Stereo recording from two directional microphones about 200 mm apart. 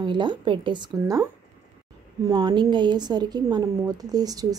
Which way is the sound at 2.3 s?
20° right (ahead or behind).